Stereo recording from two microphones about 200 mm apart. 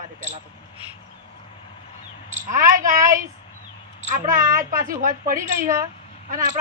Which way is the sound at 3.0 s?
15° right (ahead or behind).